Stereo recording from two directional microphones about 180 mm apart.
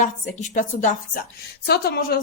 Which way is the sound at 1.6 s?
60° left (ahead or behind).